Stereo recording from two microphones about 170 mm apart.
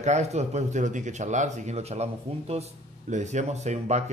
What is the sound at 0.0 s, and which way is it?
Speech, 40° right (ahead or behind).